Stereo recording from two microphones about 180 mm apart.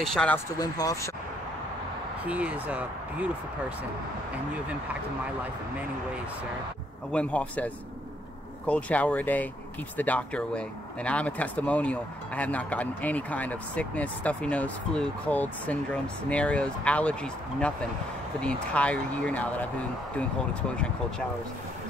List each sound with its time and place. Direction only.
0.0 s speech: 5° left (ahead or behind)
0.6 s speech: 20° left (ahead or behind)
2.2 s speech: 10° right (ahead or behind)
7.1 s speech: 5° left (ahead or behind)